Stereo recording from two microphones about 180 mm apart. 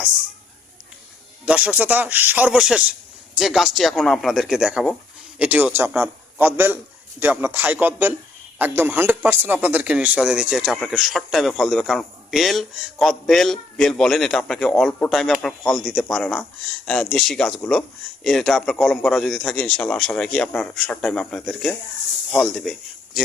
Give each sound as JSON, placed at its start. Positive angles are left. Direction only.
{"t": 1.5, "sound": "a man's voice", "side_deg": -5}